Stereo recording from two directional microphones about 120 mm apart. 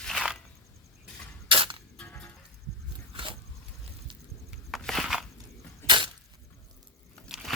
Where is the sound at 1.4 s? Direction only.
45° right (ahead or behind).